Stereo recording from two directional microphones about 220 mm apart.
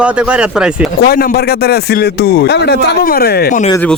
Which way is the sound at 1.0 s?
45° left (ahead or behind).